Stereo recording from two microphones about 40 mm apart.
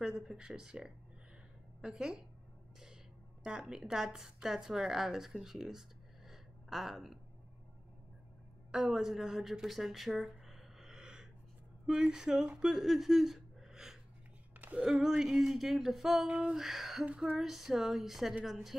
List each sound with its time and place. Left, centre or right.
0.0 s speech: centre
3.4 s a woman's voice: centre
8.7 s speech: centre
16.3 s a sound: right
16.5 s a woman's voice: centre